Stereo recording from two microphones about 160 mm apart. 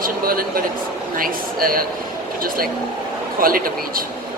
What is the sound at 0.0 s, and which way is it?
Speech, 65° right (ahead or behind).